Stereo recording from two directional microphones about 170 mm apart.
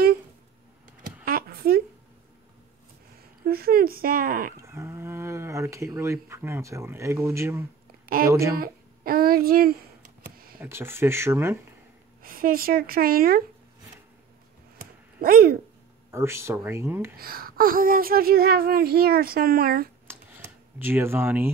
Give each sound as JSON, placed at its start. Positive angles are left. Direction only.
{"t": 1.2, "sound": "a sound", "side_deg": -60}
{"t": 3.4, "sound": "speech", "side_deg": -60}
{"t": 4.6, "sound": "speech", "side_deg": -15}
{"t": 8.5, "sound": "speech", "side_deg": -60}
{"t": 10.2, "sound": "a sound", "side_deg": -60}
{"t": 10.6, "sound": "speech", "side_deg": -15}
{"t": 12.2, "sound": "speech", "side_deg": -55}
{"t": 15.1, "sound": "speech", "side_deg": -60}
{"t": 16.1, "sound": "speech", "side_deg": -15}
{"t": 17.2, "sound": "speech", "side_deg": -60}
{"t": 20.1, "sound": "computer keyboard", "side_deg": -10}